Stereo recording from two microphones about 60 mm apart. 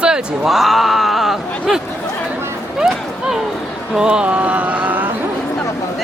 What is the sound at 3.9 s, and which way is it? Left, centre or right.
Speech, centre.